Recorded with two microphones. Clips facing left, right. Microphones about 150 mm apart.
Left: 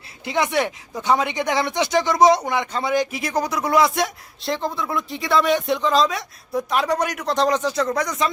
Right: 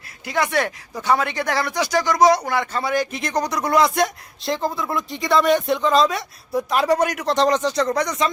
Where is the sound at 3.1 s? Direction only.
5° left (ahead or behind).